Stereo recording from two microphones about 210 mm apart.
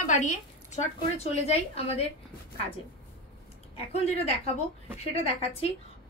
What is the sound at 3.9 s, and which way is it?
Speech, 30° left (ahead or behind).